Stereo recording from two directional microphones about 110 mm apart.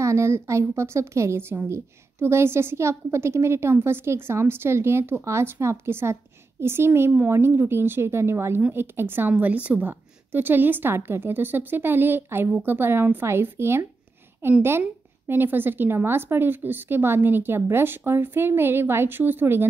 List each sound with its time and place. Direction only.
0.0 s a woman's voice: 25° right (ahead or behind)